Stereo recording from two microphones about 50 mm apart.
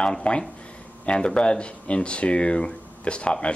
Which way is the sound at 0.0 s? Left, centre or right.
Left.